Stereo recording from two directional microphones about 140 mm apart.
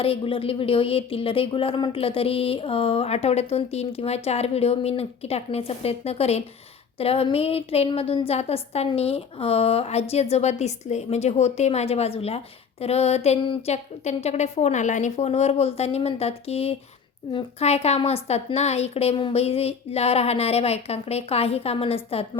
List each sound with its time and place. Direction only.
0.0 s speech: 40° left (ahead or behind)
13.4 s a woman's voice: 40° left (ahead or behind)
14.0 s speech: 50° left (ahead or behind)